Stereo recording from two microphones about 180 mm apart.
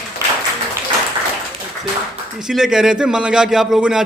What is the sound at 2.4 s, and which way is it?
A man's voice, 5° right (ahead or behind).